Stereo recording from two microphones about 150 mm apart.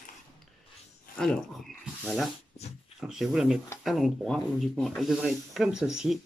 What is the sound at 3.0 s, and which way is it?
Speech, 5° right (ahead or behind).